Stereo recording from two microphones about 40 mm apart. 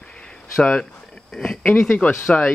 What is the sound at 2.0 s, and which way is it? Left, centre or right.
Speech, left.